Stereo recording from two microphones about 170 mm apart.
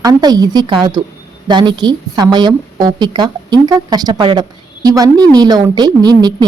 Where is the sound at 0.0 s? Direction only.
25° right (ahead or behind).